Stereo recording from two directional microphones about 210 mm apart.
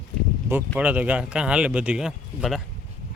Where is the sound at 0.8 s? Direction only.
5° right (ahead or behind).